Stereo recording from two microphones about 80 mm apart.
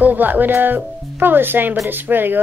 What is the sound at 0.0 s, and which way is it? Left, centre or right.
Speech, right.